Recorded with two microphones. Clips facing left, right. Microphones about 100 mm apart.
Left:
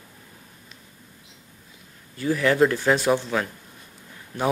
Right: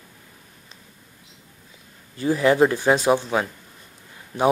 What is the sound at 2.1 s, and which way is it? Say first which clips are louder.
Speech: right 3 dB; 25° right (ahead or behind).